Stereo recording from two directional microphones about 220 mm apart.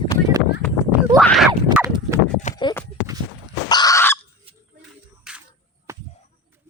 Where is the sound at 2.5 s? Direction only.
20° left (ahead or behind).